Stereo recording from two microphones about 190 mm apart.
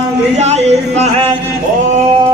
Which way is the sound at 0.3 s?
35° right (ahead or behind).